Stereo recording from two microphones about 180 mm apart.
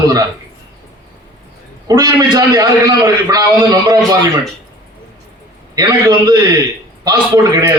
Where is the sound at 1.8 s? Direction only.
20° right (ahead or behind).